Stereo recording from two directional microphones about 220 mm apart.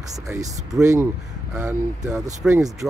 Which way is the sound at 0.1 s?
15° right (ahead or behind).